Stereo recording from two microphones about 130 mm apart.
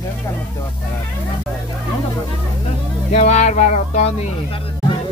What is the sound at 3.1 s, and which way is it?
Speech, 60° left (ahead or behind).